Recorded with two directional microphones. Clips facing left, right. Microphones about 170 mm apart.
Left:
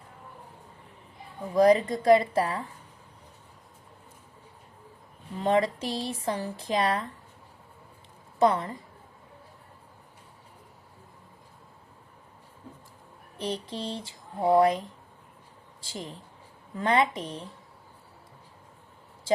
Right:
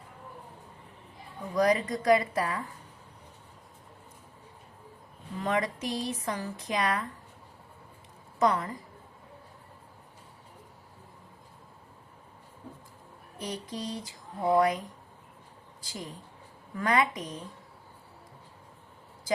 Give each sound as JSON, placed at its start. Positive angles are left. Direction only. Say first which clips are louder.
{"t": 1.5, "sound": "speech", "louder": "left 5 dB", "side_deg": 30}
{"t": 5.4, "sound": "speech", "louder": "left 5 dB", "side_deg": 30}
{"t": 8.4, "sound": "speech", "louder": "left 3 dB", "side_deg": 30}
{"t": 13.4, "sound": "speech", "louder": "left 3 dB", "side_deg": 30}
{"t": 15.8, "sound": "speech", "louder": "left 2 dB", "side_deg": 25}